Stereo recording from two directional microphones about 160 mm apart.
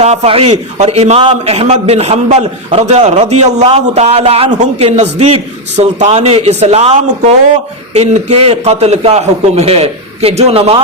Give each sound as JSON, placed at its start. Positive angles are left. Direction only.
{"t": 0.0, "sound": "a man's voice", "side_deg": -40}